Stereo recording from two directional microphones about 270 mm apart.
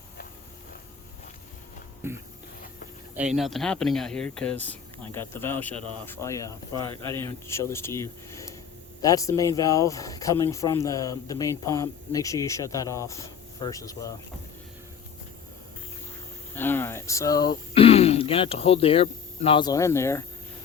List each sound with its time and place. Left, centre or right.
2.0 s a sound: centre
3.2 s speech: centre
5.7 s speech: centre
6.1 s speech: centre
16.6 s speech: centre